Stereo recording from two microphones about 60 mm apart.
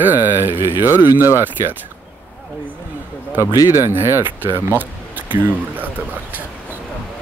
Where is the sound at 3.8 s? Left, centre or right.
Right.